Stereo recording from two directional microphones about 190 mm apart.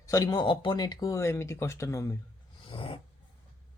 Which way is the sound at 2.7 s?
30° left (ahead or behind).